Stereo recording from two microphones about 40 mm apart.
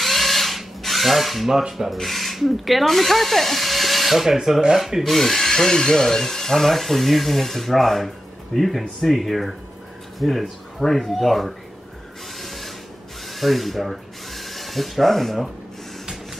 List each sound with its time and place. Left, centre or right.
0.0 s drill: centre
1.6 s rub: centre
1.9 s speech: centre
5.0 s speech: centre
12.4 s a sound: centre